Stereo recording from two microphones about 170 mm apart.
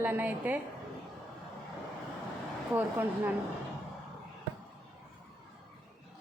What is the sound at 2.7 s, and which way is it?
Speech, 10° right (ahead or behind).